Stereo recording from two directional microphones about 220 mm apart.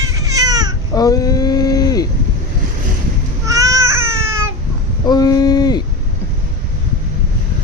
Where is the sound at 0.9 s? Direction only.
15° left (ahead or behind).